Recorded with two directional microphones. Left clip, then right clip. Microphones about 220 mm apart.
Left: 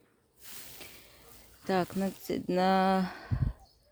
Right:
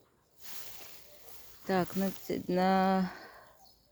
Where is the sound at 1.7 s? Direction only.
15° left (ahead or behind).